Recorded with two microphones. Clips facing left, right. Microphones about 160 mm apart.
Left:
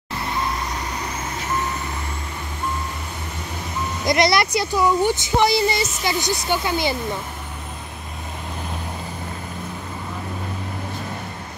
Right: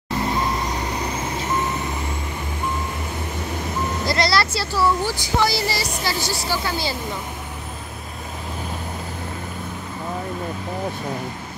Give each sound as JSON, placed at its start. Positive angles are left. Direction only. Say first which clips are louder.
{"t": 4.0, "sound": "speech", "louder": "left 4 dB", "side_deg": 20}